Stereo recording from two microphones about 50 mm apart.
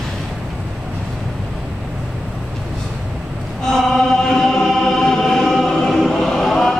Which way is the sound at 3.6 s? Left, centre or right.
Centre.